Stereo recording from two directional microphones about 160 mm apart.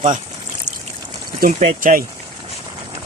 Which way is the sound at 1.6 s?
55° right (ahead or behind).